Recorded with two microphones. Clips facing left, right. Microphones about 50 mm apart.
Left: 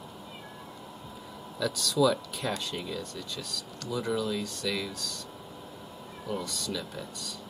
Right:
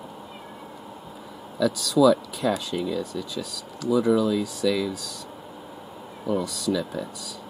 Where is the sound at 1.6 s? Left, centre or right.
Centre.